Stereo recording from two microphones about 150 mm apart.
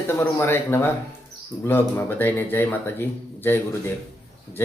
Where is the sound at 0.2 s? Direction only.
15° left (ahead or behind).